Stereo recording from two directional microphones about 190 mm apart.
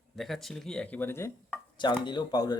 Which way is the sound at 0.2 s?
Centre (ahead or behind).